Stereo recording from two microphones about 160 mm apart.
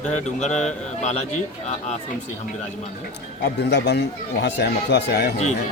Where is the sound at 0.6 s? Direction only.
45° left (ahead or behind).